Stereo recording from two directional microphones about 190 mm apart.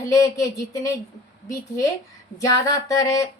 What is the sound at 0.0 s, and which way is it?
Speech, 15° left (ahead or behind).